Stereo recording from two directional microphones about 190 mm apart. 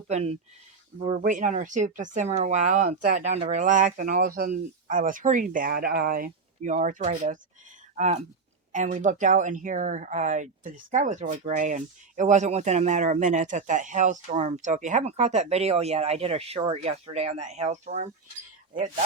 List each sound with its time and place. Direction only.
0.1 s speech: 35° right (ahead or behind)